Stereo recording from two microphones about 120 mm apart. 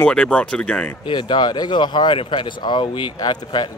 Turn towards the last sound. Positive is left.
turn(degrees=40)  # may be behind; listen again after turning